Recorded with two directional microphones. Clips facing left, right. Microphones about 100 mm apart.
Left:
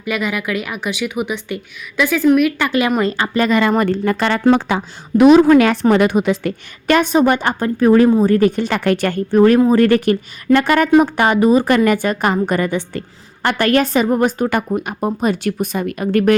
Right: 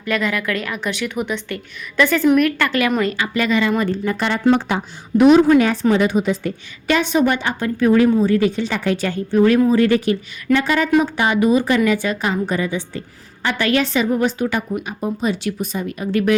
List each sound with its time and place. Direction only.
0.0 s a woman's voice: 10° left (ahead or behind)
2.6 s a woman's voice: 20° left (ahead or behind)
3.0 s a woman's voice: 35° left (ahead or behind); by 3.9 s 55° left (ahead or behind)
4.0 s a woman's voice: 85° left
5.9 s a woman's voice: 60° left (ahead or behind)
6.8 s a woman's voice: 50° left (ahead or behind)
11.3 s a woman's voice: 40° left (ahead or behind)
11.9 s a woman's voice: 55° left (ahead or behind)